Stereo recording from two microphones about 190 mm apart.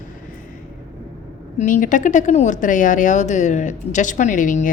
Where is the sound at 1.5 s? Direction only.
45° left (ahead or behind).